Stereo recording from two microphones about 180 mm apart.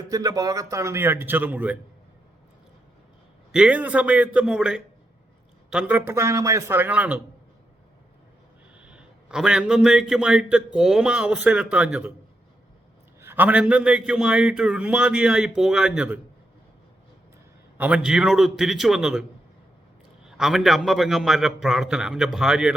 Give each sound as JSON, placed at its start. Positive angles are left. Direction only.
{"t": 0.1, "sound": "a man's voice", "side_deg": -20}
{"t": 3.5, "sound": "a man's voice", "side_deg": -5}
{"t": 8.7, "sound": "a man's voice", "side_deg": -5}
{"t": 13.1, "sound": "a man's voice", "side_deg": -10}
{"t": 17.7, "sound": "a man's voice", "side_deg": -5}
{"t": 20.2, "sound": "a man's voice", "side_deg": -5}